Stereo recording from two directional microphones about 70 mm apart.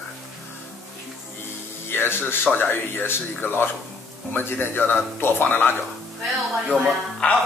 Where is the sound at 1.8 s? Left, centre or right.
Left.